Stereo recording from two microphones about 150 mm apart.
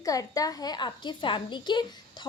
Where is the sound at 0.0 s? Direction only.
25° left (ahead or behind).